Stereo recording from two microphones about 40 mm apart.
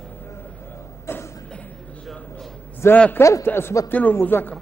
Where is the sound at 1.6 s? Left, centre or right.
Left.